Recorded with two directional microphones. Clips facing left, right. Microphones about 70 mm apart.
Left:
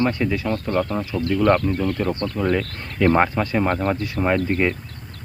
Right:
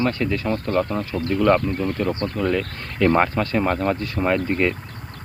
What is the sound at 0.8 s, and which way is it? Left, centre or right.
Speech, centre.